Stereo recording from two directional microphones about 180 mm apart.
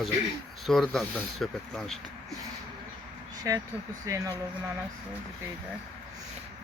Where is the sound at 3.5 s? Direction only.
15° right (ahead or behind).